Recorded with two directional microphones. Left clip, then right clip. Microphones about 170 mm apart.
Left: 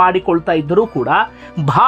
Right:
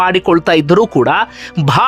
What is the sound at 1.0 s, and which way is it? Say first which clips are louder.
Speech: right 3 dB; 20° right (ahead or behind).